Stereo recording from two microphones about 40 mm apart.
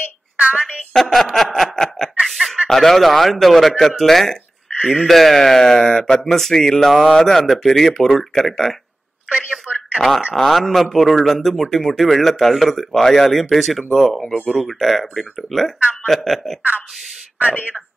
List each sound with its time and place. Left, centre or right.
0.4 s a sound: right
0.9 s a sound: centre
2.3 s chicken: centre
2.7 s a man's voice: centre
9.9 s a man's voice: centre
17.5 s speech: left